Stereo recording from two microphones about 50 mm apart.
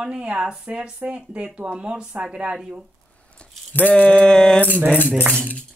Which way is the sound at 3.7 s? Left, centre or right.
Left.